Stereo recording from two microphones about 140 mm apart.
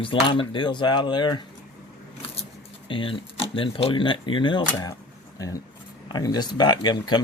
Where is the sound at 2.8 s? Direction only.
40° left (ahead or behind).